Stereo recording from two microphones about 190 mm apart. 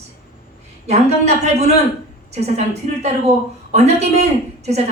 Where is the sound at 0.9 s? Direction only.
35° right (ahead or behind).